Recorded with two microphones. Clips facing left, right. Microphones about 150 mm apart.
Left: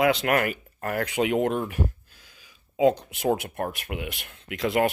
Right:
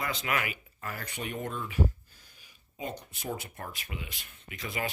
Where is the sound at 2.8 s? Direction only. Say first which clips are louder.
Left 17 dB; 90° left.